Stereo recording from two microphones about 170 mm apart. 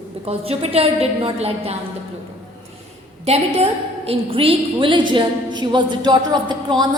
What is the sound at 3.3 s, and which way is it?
A woman's voice, 35° right (ahead or behind).